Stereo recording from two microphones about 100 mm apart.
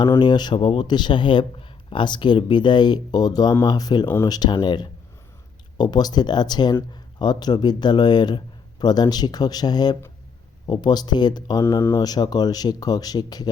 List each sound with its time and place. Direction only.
0.2 s speech: 45° left (ahead or behind)
11.6 s speech: 25° left (ahead or behind)
11.9 s speech: 40° left (ahead or behind)